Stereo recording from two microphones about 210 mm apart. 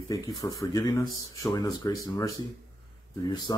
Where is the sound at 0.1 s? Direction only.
15° left (ahead or behind).